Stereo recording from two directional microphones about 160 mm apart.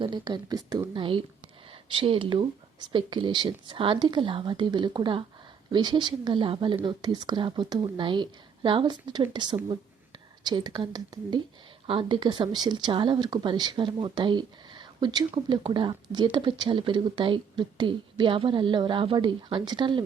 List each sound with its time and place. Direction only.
0.0 s speech: 30° right (ahead or behind)